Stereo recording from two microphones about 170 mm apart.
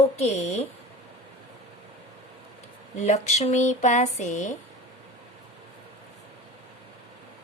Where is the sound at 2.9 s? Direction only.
40° left (ahead or behind).